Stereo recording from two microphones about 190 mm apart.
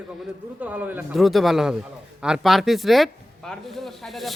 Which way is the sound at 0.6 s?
10° right (ahead or behind).